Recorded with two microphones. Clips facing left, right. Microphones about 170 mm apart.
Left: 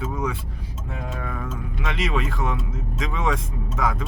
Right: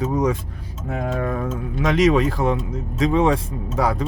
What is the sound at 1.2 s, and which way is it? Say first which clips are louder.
Speech: right 7 dB; 45° right (ahead or behind).